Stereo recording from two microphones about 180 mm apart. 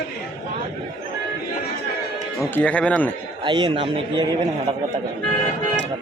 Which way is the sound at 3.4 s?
25° right (ahead or behind).